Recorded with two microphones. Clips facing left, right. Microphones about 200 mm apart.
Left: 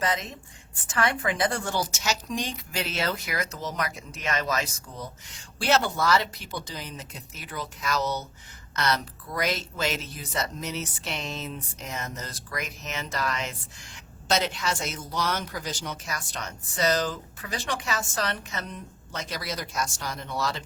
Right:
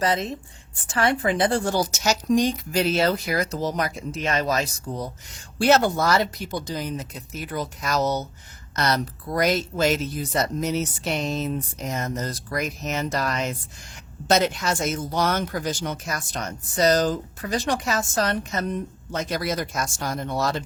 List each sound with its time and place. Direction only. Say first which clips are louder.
0.0 s a woman's voice: right 5 dB; 35° right (ahead or behind)